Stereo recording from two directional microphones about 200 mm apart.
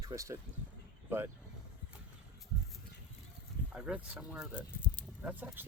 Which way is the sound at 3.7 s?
5° right (ahead or behind).